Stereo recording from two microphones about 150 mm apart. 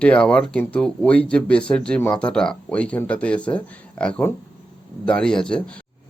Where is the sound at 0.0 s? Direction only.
5° left (ahead or behind).